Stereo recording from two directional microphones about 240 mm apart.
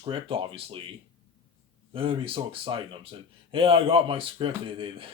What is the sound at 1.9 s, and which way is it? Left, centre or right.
Speech, right.